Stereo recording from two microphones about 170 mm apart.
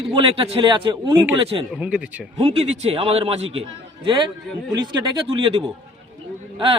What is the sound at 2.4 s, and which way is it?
A man's voice, 35° right (ahead or behind).